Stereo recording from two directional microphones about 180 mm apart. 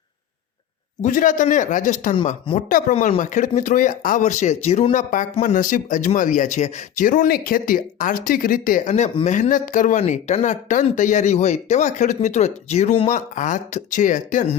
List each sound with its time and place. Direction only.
1.0 s speech: 45° left (ahead or behind)